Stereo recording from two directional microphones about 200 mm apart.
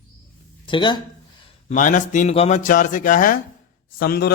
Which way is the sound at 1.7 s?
40° left (ahead or behind).